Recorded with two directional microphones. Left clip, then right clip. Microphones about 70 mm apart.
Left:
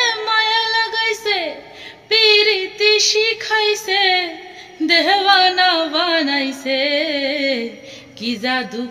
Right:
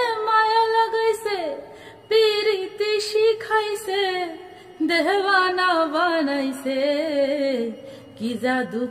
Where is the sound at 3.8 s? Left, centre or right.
Right.